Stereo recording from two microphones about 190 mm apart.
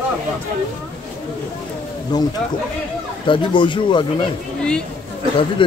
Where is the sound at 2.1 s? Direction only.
20° left (ahead or behind).